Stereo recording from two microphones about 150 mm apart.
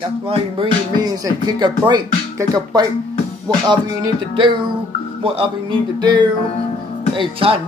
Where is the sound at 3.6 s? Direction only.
30° right (ahead or behind).